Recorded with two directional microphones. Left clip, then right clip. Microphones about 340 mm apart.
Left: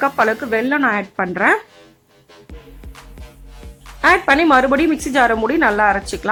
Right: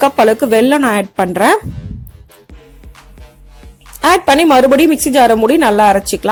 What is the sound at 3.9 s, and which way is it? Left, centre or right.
A woman's voice, centre.